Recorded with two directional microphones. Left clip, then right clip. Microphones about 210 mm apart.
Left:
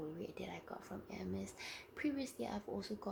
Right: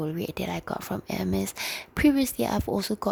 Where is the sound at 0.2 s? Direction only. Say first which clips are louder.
Right 16 dB; 55° right (ahead or behind).